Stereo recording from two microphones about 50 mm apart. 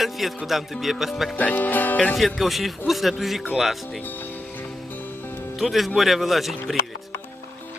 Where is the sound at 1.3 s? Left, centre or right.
Left.